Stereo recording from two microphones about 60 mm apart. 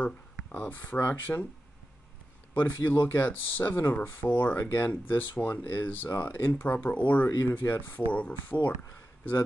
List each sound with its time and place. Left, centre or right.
0.0 s speech: left
2.5 s speech: left
7.2 s speech: left
8.1 s speech: left